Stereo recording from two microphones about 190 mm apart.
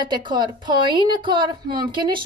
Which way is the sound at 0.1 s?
25° right (ahead or behind).